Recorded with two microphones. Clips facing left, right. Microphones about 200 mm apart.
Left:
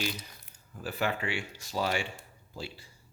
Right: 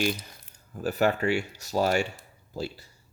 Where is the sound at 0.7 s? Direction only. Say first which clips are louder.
Right 7 dB; 45° right (ahead or behind).